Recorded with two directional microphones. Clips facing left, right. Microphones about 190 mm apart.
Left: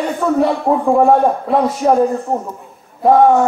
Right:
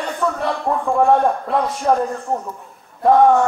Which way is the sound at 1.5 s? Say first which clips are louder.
Left 5 dB; centre (ahead or behind).